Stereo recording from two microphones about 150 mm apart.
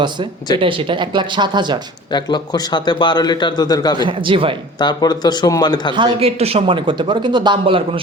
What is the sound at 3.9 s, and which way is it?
Speech, 35° right (ahead or behind).